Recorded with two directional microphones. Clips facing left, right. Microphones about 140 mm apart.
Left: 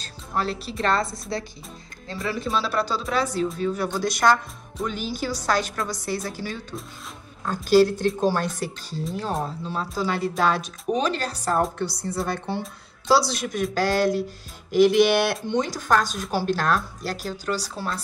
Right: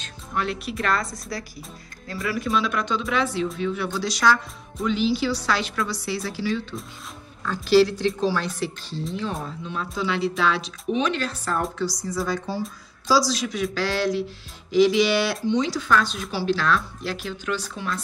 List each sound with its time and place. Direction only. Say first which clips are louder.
0.0 s speech: left 1 dB; 35° left (ahead or behind)
2.2 s a woman's voice: right 2 dB; 30° left (ahead or behind); by 9.0 s 45° left (ahead or behind)
9.4 s speech: left 3 dB; 35° left (ahead or behind)
11.8 s a woman's voice: right 1 dB; 60° left (ahead or behind); by 18.0 s 35° left (ahead or behind)